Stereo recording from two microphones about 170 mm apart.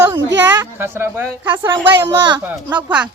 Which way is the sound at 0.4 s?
15° right (ahead or behind).